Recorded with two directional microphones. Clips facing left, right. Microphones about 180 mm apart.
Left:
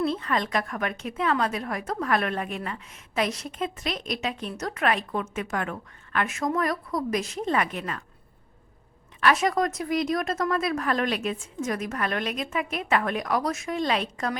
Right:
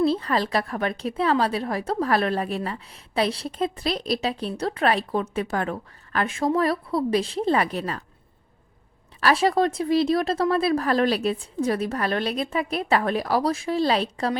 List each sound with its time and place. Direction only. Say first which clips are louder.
0.0 s a woman's voice: right 4 dB; 35° right (ahead or behind)
9.2 s a woman's voice: right 3 dB; 30° right (ahead or behind)